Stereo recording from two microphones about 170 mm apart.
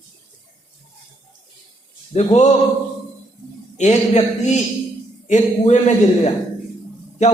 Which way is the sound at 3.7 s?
40° left (ahead or behind).